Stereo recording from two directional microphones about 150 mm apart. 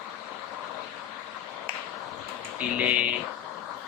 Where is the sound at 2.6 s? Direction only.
10° right (ahead or behind).